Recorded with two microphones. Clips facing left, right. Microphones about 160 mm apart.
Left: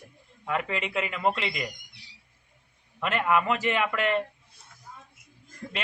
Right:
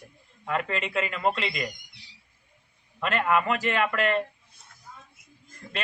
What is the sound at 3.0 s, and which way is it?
Speech, 15° left (ahead or behind).